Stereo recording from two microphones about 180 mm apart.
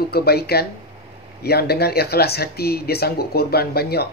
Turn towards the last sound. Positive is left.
turn(degrees=60)  # may be behind; listen again after turning